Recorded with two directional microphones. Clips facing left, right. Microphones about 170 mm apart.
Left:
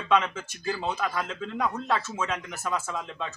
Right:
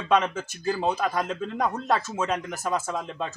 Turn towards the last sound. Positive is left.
turn(degrees=-40)  # may be behind; listen again after turning